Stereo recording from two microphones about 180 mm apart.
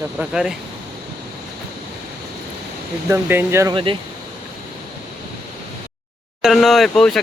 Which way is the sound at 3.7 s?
30° right (ahead or behind).